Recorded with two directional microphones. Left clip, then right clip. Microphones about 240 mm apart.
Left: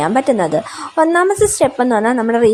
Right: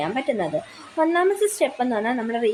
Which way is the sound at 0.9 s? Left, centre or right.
Centre.